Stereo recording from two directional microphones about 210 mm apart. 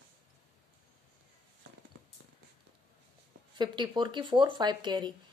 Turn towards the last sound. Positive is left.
turn(degrees=-20)  # may be behind; listen again after turning